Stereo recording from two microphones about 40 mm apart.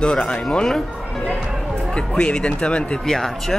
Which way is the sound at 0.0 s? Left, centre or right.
Left.